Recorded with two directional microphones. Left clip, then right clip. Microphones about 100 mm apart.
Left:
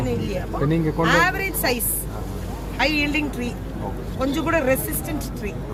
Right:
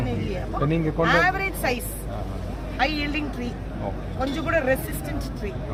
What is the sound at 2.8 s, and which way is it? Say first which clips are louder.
A woman's voice: left 4 dB; 5° right (ahead or behind).